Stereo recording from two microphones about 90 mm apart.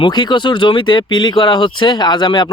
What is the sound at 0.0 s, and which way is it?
Speech, 55° left (ahead or behind).